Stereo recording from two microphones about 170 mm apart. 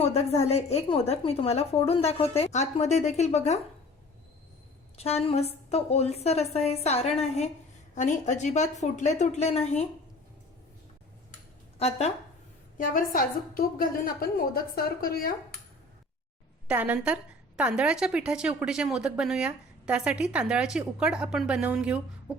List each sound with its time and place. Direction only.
0.0 s a woman's voice: 40° left (ahead or behind)
4.9 s a woman's voice: 35° left (ahead or behind)
11.8 s a woman's voice: 40° left (ahead or behind)
12.7 s a woman's voice: 55° left (ahead or behind)
16.6 s a woman's voice: 10° right (ahead or behind)